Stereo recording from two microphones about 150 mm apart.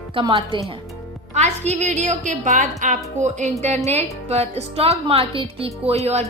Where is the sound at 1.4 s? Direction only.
45° right (ahead or behind).